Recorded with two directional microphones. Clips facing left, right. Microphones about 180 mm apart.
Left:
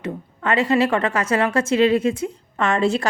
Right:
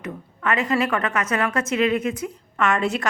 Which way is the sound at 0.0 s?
30° left (ahead or behind).